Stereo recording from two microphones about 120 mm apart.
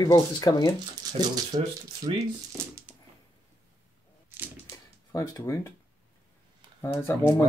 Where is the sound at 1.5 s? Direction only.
60° right (ahead or behind).